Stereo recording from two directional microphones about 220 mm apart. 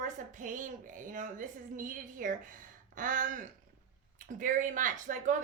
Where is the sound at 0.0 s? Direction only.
35° right (ahead or behind).